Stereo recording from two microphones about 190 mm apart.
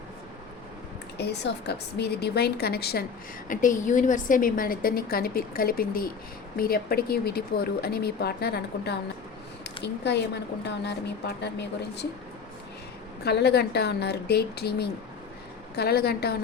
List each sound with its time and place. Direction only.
1.2 s speech: 60° left (ahead or behind)
3.5 s a woman's voice: 45° left (ahead or behind); by 11.5 s 60° left (ahead or behind)
13.2 s speech: 60° left (ahead or behind)